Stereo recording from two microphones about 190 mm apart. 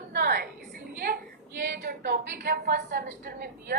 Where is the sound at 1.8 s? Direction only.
55° right (ahead or behind).